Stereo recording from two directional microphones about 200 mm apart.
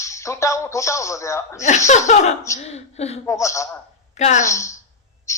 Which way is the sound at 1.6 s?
35° left (ahead or behind).